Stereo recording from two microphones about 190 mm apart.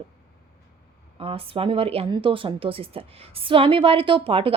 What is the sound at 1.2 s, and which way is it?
A woman's voice, 30° right (ahead or behind).